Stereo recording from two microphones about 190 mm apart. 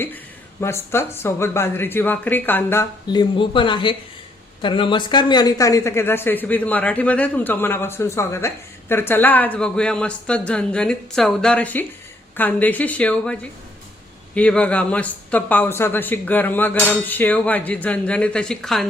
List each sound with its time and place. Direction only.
0.6 s speech: 15° left (ahead or behind)